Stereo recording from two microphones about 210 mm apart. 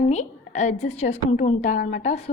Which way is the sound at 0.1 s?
35° left (ahead or behind).